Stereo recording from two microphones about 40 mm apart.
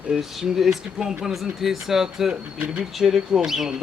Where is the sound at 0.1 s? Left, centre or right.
Centre.